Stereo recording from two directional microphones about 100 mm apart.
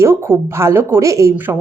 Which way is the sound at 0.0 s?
25° right (ahead or behind).